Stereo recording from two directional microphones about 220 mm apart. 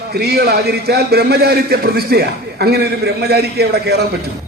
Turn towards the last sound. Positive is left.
turn(degrees=-45)  # may be behind; listen again after turning